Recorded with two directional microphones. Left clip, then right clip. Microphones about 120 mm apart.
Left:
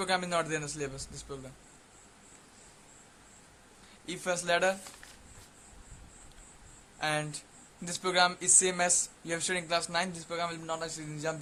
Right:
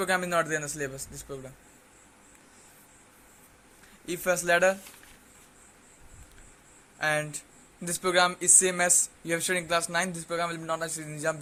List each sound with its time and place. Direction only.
0.0 s speech: 30° right (ahead or behind)
4.0 s speech: 30° right (ahead or behind)
7.0 s speech: 35° right (ahead or behind)